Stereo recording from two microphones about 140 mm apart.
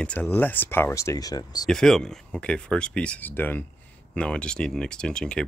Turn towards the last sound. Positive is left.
turn(degrees=5)  # may be behind; listen again after turning